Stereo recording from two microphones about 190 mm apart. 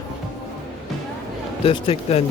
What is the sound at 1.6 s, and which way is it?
Speech, 30° left (ahead or behind).